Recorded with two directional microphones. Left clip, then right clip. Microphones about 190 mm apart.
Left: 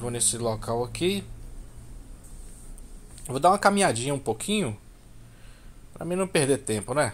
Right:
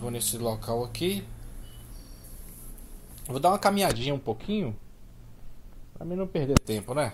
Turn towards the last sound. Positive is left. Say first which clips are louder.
# left 2 dB
turn(degrees=10)  # may be behind; listen again after turning